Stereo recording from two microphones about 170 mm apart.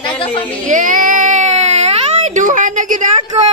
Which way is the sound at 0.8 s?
50° right (ahead or behind).